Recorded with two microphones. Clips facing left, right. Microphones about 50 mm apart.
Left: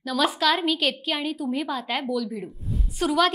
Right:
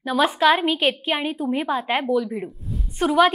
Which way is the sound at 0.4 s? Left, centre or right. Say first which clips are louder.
Right 5 dB; right.